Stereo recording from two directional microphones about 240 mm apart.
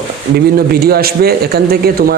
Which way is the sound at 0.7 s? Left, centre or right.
Right.